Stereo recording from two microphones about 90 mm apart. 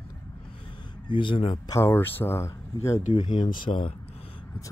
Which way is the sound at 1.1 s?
65° left (ahead or behind).